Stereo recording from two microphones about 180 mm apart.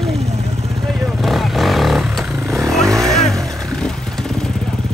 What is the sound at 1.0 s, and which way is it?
Vehicle, centre (ahead or behind).